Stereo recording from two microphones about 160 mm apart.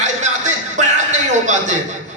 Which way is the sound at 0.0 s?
50° right (ahead or behind).